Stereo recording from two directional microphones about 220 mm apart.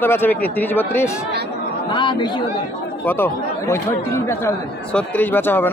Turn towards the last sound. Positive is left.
turn(degrees=10)  # may be behind; listen again after turning